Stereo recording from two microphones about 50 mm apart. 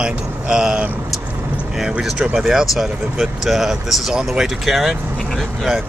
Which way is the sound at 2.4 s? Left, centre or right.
Centre.